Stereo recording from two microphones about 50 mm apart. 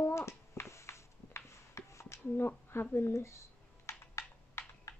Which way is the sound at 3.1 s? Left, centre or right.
Left.